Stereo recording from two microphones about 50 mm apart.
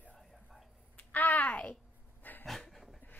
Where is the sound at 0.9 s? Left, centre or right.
Left.